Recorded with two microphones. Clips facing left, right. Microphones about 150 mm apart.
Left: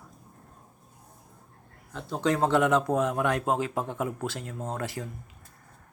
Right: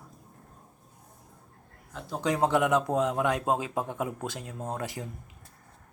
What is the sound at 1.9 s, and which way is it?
Speech, 10° right (ahead or behind).